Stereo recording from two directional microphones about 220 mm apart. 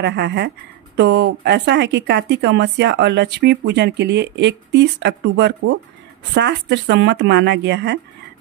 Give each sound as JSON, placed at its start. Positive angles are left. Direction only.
{"t": 0.0, "sound": "speech", "side_deg": -50}